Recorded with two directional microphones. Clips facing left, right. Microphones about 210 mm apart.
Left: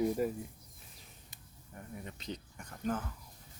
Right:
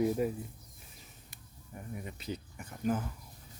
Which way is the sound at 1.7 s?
10° right (ahead or behind).